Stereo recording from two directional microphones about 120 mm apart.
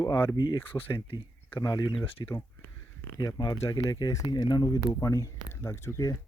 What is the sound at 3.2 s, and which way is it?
Speech, 35° left (ahead or behind).